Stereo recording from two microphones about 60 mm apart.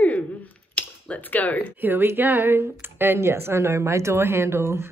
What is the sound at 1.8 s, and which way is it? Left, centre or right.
Speech, right.